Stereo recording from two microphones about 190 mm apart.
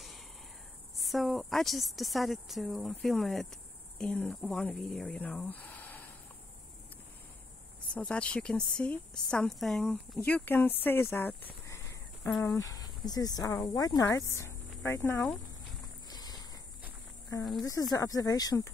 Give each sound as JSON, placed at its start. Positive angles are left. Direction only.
{"t": 1.0, "sound": "speech", "side_deg": 0}
{"t": 7.9, "sound": "speech", "side_deg": 5}
{"t": 12.3, "sound": "speech", "side_deg": 0}
{"t": 12.5, "sound": "speech", "side_deg": 20}
{"t": 16.1, "sound": "a sound", "side_deg": 20}
{"t": 17.6, "sound": "speech", "side_deg": 20}